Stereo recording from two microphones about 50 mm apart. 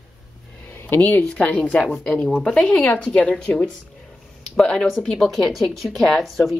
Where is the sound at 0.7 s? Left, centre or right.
Left.